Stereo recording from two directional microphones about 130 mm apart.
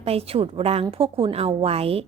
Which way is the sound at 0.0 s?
50° right (ahead or behind).